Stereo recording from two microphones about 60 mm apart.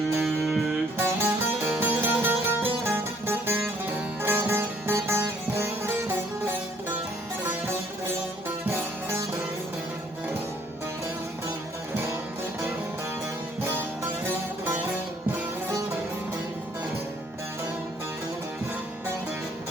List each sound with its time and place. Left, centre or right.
0.2 s music: centre
0.9 s music: right
8.4 s music: right
13.6 s music: right